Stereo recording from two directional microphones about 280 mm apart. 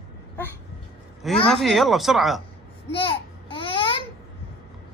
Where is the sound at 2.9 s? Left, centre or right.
Centre.